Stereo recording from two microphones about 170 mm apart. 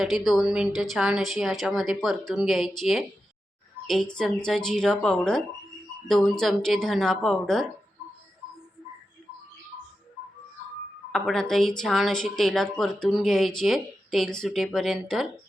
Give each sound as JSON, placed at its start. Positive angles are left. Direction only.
{"t": 0.0, "sound": "speech", "side_deg": 0}
{"t": 11.1, "sound": "speech", "side_deg": 5}